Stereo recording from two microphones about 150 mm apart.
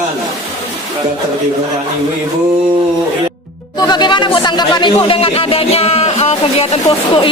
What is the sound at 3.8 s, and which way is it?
Speech, 30° left (ahead or behind).